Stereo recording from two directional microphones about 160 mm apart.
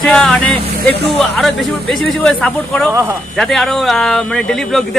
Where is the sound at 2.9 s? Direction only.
15° right (ahead or behind).